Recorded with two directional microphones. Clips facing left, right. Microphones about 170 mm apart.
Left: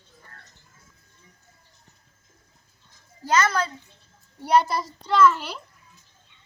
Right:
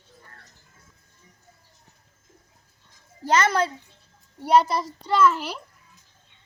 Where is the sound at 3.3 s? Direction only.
30° right (ahead or behind).